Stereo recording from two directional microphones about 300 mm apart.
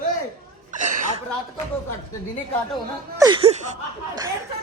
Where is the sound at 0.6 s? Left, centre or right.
Right.